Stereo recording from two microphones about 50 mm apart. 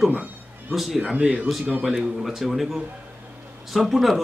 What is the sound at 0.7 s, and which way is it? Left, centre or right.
Speech, centre.